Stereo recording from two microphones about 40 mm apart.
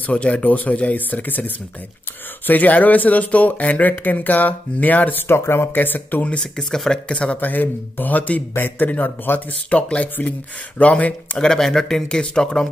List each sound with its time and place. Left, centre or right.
0.0 s speech: left
5.3 s speech: left
5.8 s speech: left
6.4 s speech: centre
7.1 s speech: left
7.3 s speech: left
9.7 s speech: left
11.3 s speech: centre
12.1 s speech: left